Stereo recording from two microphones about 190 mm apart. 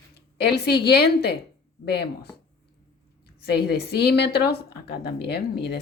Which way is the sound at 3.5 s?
60° left (ahead or behind).